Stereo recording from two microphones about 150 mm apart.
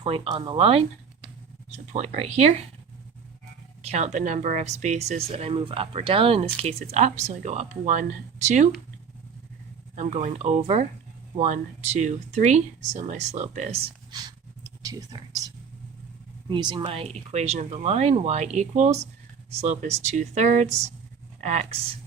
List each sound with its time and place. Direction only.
0.0 s speech: 40° right (ahead or behind)
3.8 s speech: 50° right (ahead or behind)
9.9 s speech: 50° right (ahead or behind)
14.1 s a sound: 25° right (ahead or behind)
14.8 s speech: 25° right (ahead or behind); by 21.8 s 50° right (ahead or behind)